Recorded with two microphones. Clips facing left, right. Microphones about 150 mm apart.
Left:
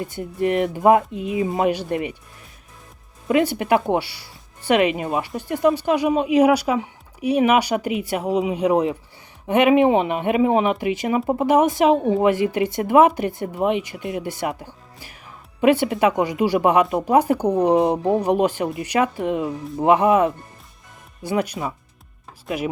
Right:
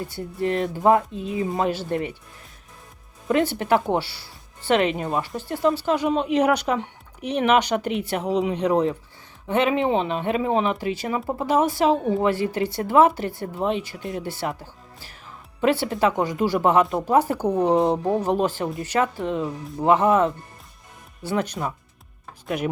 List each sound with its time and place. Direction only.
0.0 s speech: 15° left (ahead or behind)
3.2 s speech: 10° left (ahead or behind)